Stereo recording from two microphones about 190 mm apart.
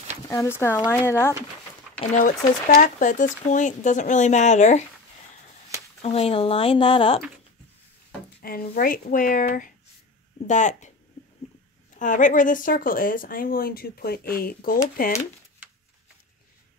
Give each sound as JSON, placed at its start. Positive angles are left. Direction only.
{"t": 0.3, "sound": "speech", "side_deg": 15}
{"t": 2.0, "sound": "speech", "side_deg": 40}
{"t": 6.0, "sound": "speech", "side_deg": 30}
{"t": 8.4, "sound": "speech", "side_deg": 50}
{"t": 12.0, "sound": "speech", "side_deg": 40}